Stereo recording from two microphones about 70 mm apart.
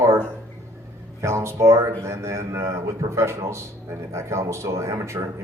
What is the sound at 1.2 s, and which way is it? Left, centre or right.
Speech, right.